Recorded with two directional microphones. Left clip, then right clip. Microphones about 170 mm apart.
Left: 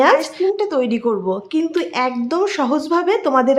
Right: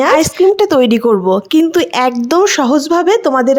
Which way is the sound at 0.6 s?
55° right (ahead or behind).